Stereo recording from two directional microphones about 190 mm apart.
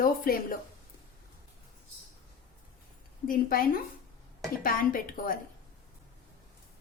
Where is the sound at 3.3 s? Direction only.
50° left (ahead or behind).